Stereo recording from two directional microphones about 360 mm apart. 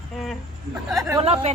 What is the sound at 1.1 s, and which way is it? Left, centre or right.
Speech, centre.